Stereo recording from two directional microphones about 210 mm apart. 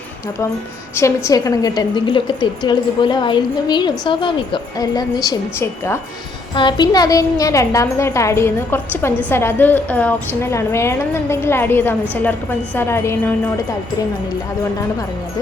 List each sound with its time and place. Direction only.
0.9 s a woman's voice: 15° left (ahead or behind)
6.5 s a woman's voice: 20° left (ahead or behind)